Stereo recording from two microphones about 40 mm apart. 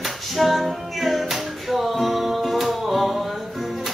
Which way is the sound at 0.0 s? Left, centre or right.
Centre.